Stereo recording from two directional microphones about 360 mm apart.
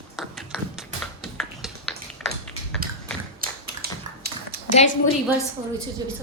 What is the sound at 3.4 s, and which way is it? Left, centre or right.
Typewriter, right.